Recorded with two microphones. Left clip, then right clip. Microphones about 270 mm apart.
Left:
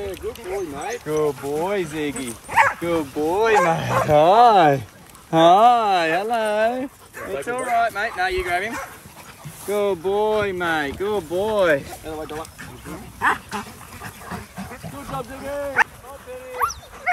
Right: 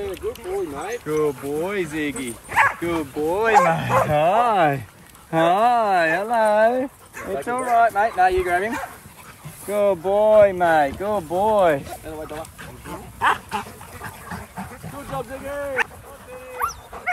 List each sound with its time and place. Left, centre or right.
0.0 s speech: centre
6.4 s speech: centre
7.7 s speech: centre
12.8 s dog: right
15.0 s speech: centre
16.5 s dog: left